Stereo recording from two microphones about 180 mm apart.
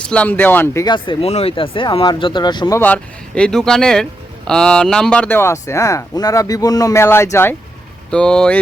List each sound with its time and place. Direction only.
0.1 s speech: 10° left (ahead or behind)
0.9 s speech: 30° left (ahead or behind); by 8.5 s 5° left (ahead or behind)